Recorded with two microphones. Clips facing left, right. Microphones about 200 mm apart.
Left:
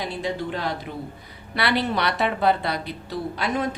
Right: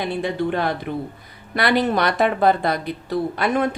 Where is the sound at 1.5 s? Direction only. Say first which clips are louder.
Right 5 dB; 45° right (ahead or behind).